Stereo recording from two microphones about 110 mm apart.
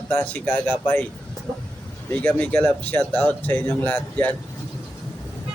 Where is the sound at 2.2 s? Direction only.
15° left (ahead or behind).